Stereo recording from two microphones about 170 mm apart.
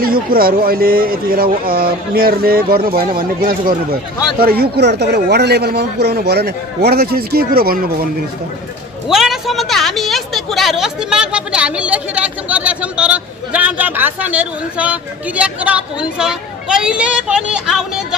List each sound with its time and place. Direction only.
0.0 s speech: 60° right (ahead or behind)
9.0 s a woman's voice: centre (ahead or behind)